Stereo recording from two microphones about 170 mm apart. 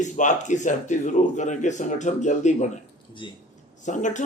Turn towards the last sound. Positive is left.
turn(degrees=45)  # may be behind; listen again after turning